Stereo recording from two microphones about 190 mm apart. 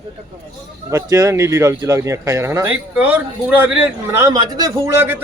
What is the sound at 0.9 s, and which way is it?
Speech, 15° right (ahead or behind).